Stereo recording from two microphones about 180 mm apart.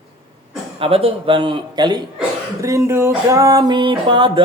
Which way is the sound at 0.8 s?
30° right (ahead or behind).